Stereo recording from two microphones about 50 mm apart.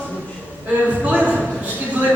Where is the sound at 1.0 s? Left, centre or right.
Right.